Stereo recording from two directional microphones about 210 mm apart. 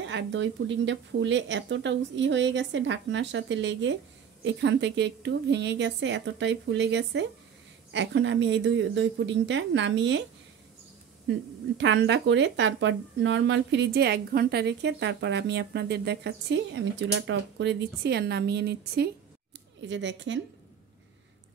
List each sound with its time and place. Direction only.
0.0 s speech: 60° right (ahead or behind)
11.8 s speech: 55° right (ahead or behind)